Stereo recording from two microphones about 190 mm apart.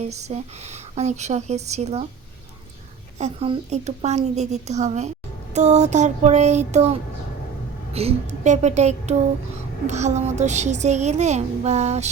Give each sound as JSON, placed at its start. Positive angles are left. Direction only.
{"t": 0.0, "sound": "a child's voice", "side_deg": -35}
{"t": 3.2, "sound": "a child's voice", "side_deg": -30}